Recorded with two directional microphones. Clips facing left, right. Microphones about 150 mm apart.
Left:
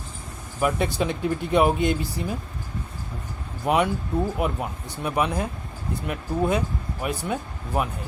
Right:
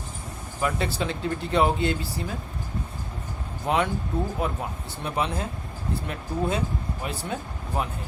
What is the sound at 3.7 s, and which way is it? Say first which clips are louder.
Speech: left 3 dB; 15° left (ahead or behind).